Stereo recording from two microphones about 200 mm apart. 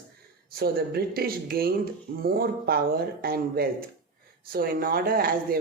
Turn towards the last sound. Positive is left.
turn(degrees=-45)  # may be behind; listen again after turning